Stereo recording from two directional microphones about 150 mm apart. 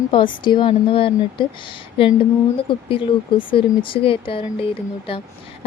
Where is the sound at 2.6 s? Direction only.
35° left (ahead or behind).